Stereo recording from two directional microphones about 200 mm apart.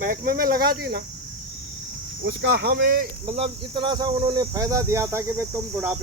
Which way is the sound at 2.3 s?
55° right (ahead or behind).